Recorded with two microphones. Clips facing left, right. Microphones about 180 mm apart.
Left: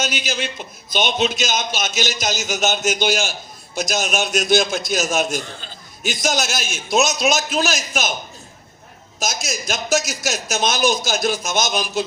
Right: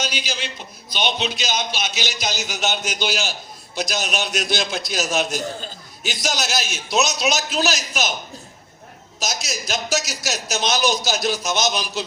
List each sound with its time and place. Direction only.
0.0 s a man's voice: 50° left (ahead or behind)
5.4 s a man's voice: 40° right (ahead or behind)
6.0 s a man's voice: 50° left (ahead or behind)
9.2 s a man's voice: 50° left (ahead or behind)